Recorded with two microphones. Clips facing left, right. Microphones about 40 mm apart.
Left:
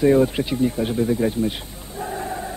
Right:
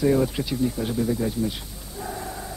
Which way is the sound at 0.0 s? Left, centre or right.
Left.